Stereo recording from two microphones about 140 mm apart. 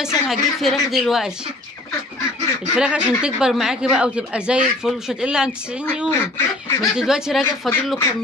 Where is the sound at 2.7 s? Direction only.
5° right (ahead or behind).